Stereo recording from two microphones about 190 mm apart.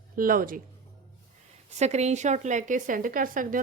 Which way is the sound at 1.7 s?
35° right (ahead or behind).